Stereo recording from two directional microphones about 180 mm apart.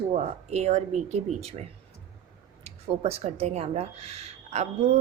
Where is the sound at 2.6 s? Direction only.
35° right (ahead or behind).